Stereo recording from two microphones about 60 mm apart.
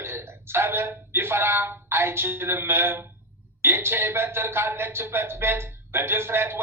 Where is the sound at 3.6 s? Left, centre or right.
Right.